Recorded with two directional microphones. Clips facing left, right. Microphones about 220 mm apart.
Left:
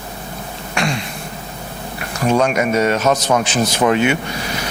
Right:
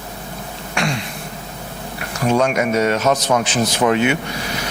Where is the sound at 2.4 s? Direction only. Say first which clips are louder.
Left 1 dB; 15° left (ahead or behind).